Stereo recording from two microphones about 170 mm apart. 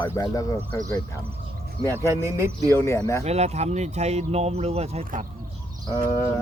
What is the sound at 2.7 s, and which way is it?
Speech, 15° left (ahead or behind).